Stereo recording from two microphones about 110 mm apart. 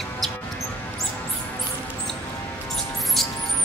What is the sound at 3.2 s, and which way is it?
Mouse, centre (ahead or behind).